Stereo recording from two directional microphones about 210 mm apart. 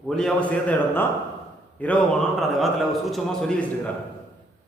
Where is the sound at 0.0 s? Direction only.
Centre (ahead or behind).